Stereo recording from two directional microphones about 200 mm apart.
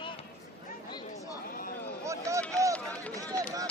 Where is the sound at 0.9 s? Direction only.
20° left (ahead or behind).